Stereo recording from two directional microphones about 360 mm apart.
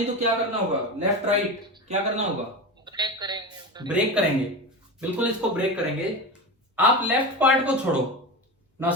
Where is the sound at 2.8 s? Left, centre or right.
Centre.